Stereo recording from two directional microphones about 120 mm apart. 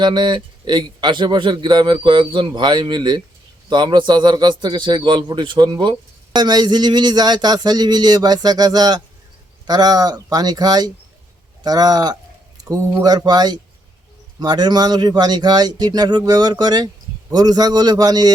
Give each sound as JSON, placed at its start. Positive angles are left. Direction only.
{"t": 0.0, "sound": "a man's voice", "side_deg": -40}